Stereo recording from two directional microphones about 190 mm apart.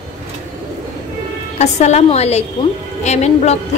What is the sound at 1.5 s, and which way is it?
A woman's voice, 35° left (ahead or behind).